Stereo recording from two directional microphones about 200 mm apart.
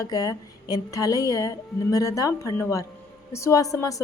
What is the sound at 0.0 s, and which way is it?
A woman's voice, 15° left (ahead or behind).